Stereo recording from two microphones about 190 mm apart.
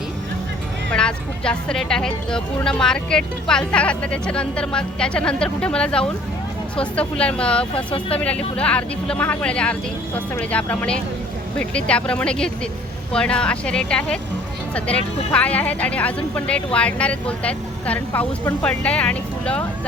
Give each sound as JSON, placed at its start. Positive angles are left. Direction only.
{"t": 0.9, "sound": "speech", "side_deg": 5}
{"t": 7.9, "sound": "speech", "side_deg": 25}
{"t": 8.2, "sound": "speech", "side_deg": 5}
{"t": 15.3, "sound": "speech", "side_deg": 10}